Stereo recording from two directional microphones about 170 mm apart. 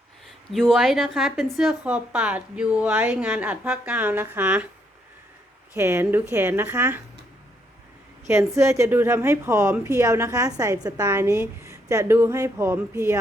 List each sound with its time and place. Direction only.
0.3 s speech: centre (ahead or behind)
5.7 s speech: 15° right (ahead or behind)
8.5 s speech: 15° right (ahead or behind)